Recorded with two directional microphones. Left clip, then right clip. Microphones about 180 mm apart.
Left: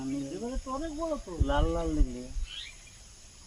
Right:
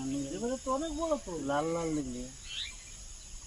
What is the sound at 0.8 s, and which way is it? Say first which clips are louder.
Cricket: even; centre (ahead or behind).